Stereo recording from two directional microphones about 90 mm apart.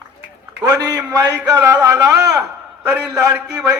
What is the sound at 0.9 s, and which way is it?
A man's voice, 40° right (ahead or behind).